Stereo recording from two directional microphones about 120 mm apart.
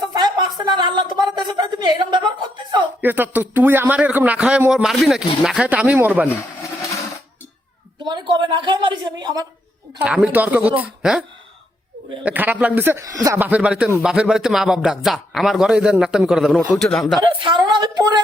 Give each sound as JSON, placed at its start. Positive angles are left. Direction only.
{"t": 0.1, "sound": "a sound", "side_deg": -35}
{"t": 3.0, "sound": "a man's voice", "side_deg": -15}
{"t": 6.2, "sound": "a sound", "side_deg": 25}
{"t": 8.0, "sound": "a woman's voice", "side_deg": -40}
{"t": 10.0, "sound": "a man's voice", "side_deg": -10}
{"t": 13.4, "sound": "a man's voice", "side_deg": -10}
{"t": 17.2, "sound": "a woman's voice", "side_deg": -40}